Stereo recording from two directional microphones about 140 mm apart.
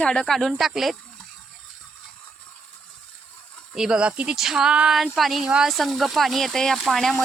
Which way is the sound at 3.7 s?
5° right (ahead or behind).